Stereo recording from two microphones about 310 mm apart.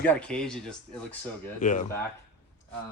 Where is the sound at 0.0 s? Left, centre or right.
Centre.